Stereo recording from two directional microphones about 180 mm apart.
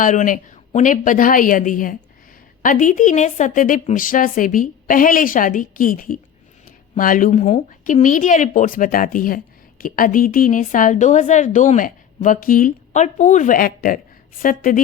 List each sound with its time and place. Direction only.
0.0 s a woman's voice: 45° left (ahead or behind)